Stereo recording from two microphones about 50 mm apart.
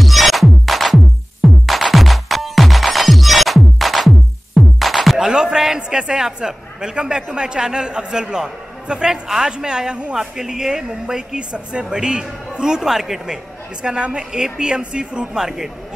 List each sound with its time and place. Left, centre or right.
0.0 s music: centre
5.2 s a man's voice: centre
10.1 s a woman's voice: centre
13.8 s a woman's voice: centre